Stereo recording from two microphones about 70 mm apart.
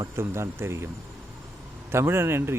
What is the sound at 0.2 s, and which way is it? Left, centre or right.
Speech, right.